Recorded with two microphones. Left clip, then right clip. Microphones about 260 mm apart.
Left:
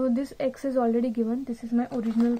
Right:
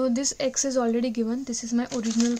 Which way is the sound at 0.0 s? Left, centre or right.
Right.